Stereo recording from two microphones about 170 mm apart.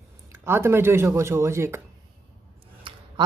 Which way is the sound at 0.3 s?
15° right (ahead or behind).